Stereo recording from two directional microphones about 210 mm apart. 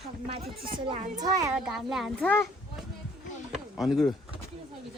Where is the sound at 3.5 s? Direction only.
Centre (ahead or behind).